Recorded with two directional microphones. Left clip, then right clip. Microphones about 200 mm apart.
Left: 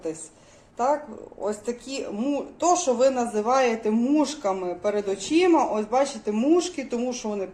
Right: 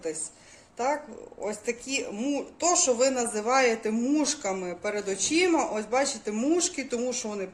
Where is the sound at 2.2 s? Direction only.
10° right (ahead or behind).